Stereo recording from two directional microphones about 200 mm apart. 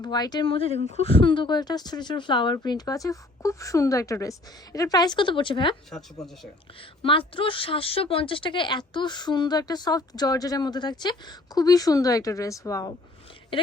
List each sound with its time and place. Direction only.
0.0 s speech: 20° left (ahead or behind)
7.0 s speech: 25° left (ahead or behind)